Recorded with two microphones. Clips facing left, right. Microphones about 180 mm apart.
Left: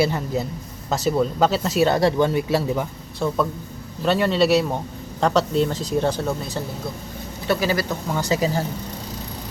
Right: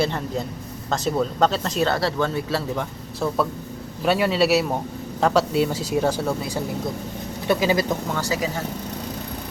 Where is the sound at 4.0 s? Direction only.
5° right (ahead or behind).